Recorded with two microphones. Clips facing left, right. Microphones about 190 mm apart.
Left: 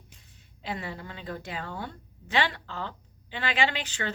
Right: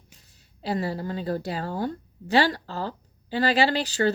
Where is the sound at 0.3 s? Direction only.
35° right (ahead or behind).